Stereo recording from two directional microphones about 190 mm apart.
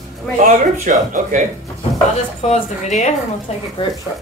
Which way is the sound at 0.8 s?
40° right (ahead or behind).